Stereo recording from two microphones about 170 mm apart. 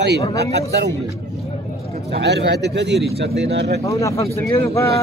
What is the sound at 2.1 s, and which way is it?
Speech, 80° right.